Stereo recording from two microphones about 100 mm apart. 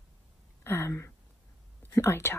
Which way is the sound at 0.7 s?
25° left (ahead or behind).